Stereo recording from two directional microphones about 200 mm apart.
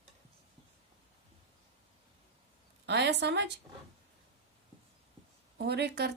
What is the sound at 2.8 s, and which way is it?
Speech, 60° right (ahead or behind).